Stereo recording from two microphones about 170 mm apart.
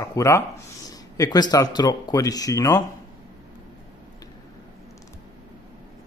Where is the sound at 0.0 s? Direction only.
15° left (ahead or behind).